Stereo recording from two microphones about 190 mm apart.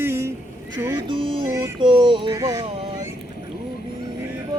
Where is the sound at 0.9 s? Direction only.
25° right (ahead or behind).